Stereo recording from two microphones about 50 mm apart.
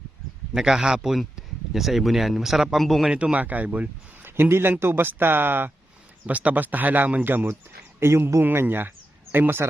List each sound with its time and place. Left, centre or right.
0.5 s a man's voice: centre
3.1 s a man's voice: centre
3.3 s speech: right
4.2 s a sound: right
4.8 s speech: right
6.2 s speech: right
7.9 s speech: right